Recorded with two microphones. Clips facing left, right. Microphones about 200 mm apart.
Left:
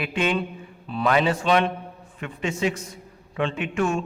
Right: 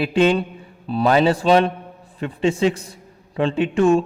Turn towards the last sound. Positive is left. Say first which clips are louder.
# right 9 dB
turn(degrees=-35)  # may be behind; listen again after turning